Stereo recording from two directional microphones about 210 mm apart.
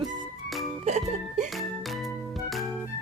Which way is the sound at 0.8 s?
35° right (ahead or behind).